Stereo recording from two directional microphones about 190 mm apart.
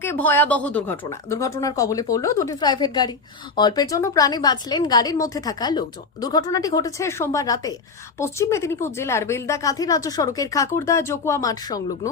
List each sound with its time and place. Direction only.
0.0 s a woman's voice: 10° left (ahead or behind)